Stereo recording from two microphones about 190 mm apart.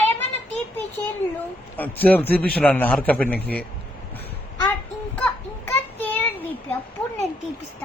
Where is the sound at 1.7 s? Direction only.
10° left (ahead or behind).